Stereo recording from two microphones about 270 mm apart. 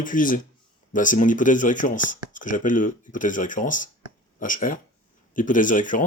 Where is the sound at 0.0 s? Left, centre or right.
Left.